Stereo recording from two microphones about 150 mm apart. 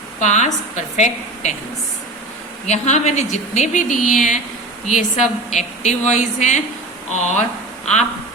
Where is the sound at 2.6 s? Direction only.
50° left (ahead or behind).